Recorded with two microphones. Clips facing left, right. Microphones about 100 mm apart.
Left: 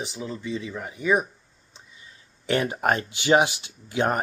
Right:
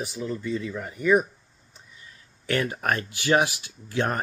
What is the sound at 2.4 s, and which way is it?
Speech, 20° left (ahead or behind).